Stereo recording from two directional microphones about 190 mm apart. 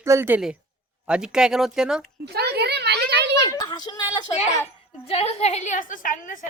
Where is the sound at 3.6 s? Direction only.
20° left (ahead or behind).